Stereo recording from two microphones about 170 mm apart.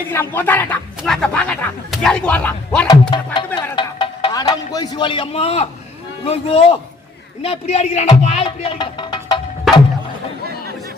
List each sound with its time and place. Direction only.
0.1 s speech: 10° left (ahead or behind)
2.8 s speech: 25° left (ahead or behind)